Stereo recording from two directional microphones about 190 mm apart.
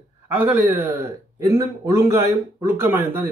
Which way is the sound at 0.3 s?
10° right (ahead or behind).